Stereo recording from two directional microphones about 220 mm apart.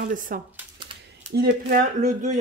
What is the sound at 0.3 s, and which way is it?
Speech, 40° right (ahead or behind).